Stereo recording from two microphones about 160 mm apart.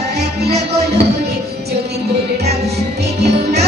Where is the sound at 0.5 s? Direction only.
40° right (ahead or behind).